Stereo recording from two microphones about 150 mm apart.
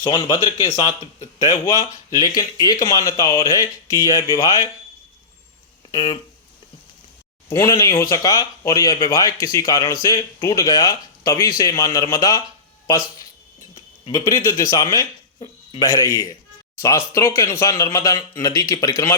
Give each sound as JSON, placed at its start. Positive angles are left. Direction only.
{"t": 0.0, "sound": "speech", "side_deg": 30}
{"t": 1.6, "sound": "speech", "side_deg": 25}
{"t": 5.9, "sound": "speech", "side_deg": 30}
{"t": 7.5, "sound": "speech", "side_deg": 20}
{"t": 14.1, "sound": "speech", "side_deg": 20}